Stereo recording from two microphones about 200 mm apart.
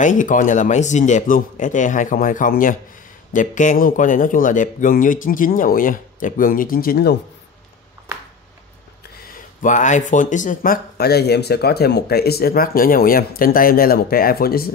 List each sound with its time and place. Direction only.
0.0 s speech: 40° left (ahead or behind)
9.6 s speech: 40° left (ahead or behind)